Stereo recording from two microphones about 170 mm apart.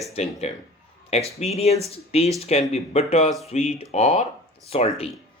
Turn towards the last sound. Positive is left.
turn(degrees=35)  # may be behind; listen again after turning